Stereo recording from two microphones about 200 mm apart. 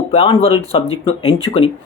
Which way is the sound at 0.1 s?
30° left (ahead or behind).